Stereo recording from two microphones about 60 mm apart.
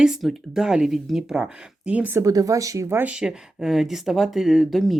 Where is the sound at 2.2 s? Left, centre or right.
Right.